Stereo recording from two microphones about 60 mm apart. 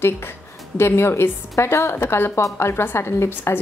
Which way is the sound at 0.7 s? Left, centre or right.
Left.